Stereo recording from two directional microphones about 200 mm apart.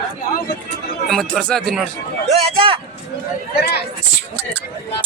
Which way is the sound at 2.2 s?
25° right (ahead or behind).